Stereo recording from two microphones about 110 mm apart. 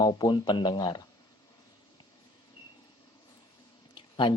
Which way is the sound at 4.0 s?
45° left (ahead or behind).